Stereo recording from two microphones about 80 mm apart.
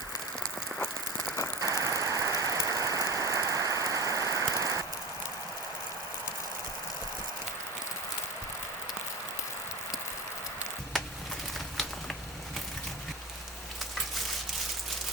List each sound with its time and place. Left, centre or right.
1.6 s ratchet: right